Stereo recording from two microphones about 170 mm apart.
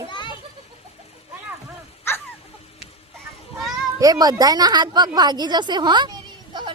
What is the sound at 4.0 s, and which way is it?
A woman's voice, 20° right (ahead or behind).